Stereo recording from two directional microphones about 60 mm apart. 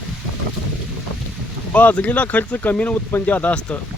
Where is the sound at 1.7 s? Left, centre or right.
Left.